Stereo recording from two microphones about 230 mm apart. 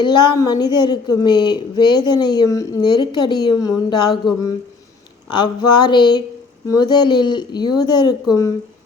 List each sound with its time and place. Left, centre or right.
0.0 s a woman's voice: centre
5.3 s a woman's voice: centre